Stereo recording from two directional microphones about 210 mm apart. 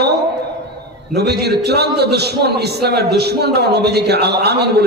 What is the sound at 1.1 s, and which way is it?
A man's voice, 50° right (ahead or behind).